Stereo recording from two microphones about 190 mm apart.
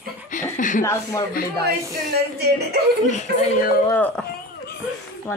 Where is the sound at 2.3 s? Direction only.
60° right (ahead or behind).